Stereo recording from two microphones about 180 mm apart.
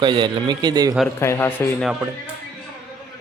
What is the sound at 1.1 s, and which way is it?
Speech, 15° left (ahead or behind).